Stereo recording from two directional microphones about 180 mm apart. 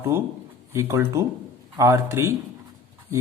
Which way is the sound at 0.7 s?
15° right (ahead or behind).